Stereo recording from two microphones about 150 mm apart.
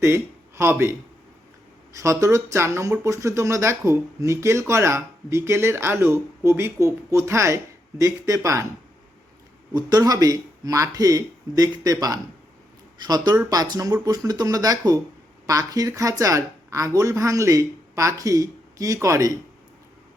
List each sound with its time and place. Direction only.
0.0 s speech: 15° right (ahead or behind)
2.0 s speech: 20° right (ahead or behind)
9.7 s speech: 25° right (ahead or behind)